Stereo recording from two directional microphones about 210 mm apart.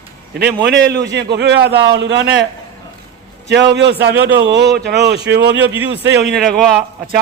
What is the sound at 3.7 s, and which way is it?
A man's voice, 55° right (ahead or behind).